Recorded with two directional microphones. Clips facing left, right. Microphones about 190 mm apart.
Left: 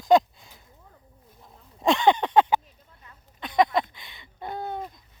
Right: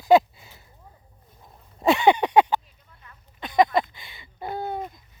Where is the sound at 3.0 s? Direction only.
25° left (ahead or behind).